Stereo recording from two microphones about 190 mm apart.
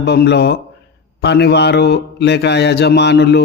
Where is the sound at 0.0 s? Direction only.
60° left (ahead or behind).